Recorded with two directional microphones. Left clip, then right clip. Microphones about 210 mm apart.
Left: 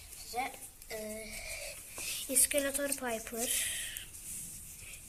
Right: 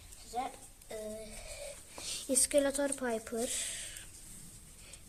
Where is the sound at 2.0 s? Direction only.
50° right (ahead or behind).